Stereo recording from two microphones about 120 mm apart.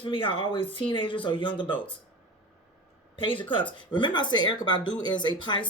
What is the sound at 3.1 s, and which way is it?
Speech, 45° left (ahead or behind).